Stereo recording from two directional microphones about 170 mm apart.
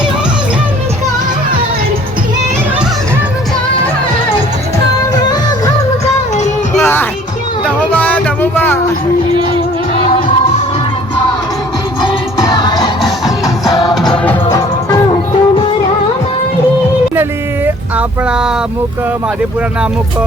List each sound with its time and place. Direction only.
5.3 s music of bollywood: 25° left (ahead or behind)
6.7 s music: 10° left (ahead or behind)
9.9 s music: 45° left (ahead or behind)
12.0 s music: 25° left (ahead or behind)
13.8 s music: centre (ahead or behind)
14.5 s music: 20° left (ahead or behind)
17.9 s a sound: 5° right (ahead or behind)